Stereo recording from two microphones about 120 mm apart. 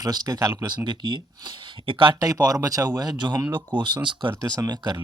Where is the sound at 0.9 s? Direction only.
40° right (ahead or behind).